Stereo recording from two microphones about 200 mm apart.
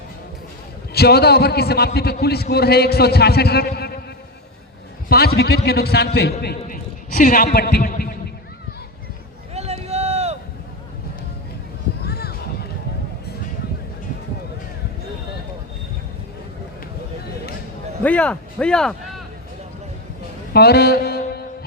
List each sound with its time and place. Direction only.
0.9 s a man's voice: 55° left (ahead or behind)
5.0 s a man's voice: 50° left (ahead or behind)
6.7 s a sound: 45° left (ahead or behind)
9.6 s run: 30° right (ahead or behind)
12.0 s a sound: 50° left (ahead or behind)
18.0 s speech: 5° left (ahead or behind)
20.5 s music: 55° left (ahead or behind)